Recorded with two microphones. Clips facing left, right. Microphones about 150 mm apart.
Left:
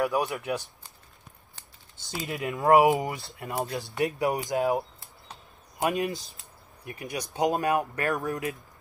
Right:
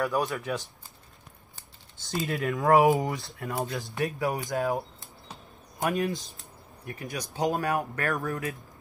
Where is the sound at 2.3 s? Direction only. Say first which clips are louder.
Left 1 dB; 5° left (ahead or behind).